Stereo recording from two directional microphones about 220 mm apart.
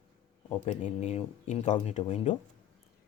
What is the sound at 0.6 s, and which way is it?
Speech, 30° left (ahead or behind).